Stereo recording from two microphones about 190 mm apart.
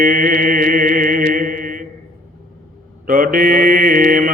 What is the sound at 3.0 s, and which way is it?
Mantra, 45° right (ahead or behind).